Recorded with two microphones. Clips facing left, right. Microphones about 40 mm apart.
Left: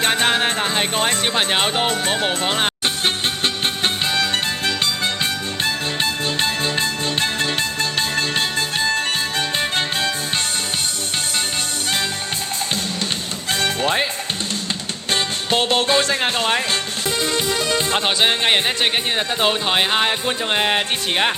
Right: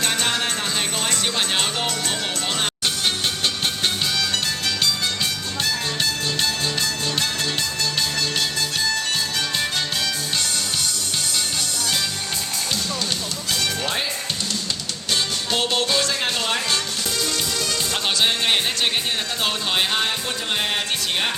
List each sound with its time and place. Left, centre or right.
0.0 s music: left
13.5 s music: left
15.1 s music: left